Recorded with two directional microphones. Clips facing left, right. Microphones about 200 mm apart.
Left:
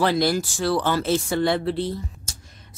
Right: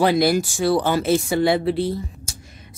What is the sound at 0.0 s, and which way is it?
Speech, 15° right (ahead or behind).